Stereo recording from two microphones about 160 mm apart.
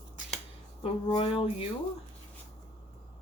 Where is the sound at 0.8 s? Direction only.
35° left (ahead or behind).